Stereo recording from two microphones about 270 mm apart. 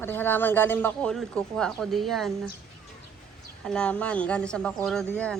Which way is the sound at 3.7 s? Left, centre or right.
Centre.